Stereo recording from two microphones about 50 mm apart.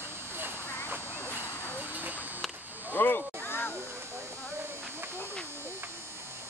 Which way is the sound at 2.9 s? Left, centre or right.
Left.